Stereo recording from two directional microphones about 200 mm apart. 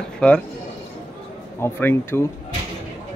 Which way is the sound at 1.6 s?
10° left (ahead or behind).